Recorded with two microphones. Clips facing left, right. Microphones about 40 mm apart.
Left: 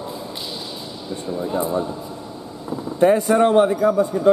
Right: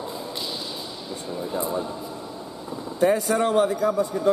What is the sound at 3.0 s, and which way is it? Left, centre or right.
Speech, left.